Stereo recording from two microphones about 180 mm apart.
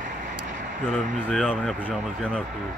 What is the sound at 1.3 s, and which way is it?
Speech, centre (ahead or behind).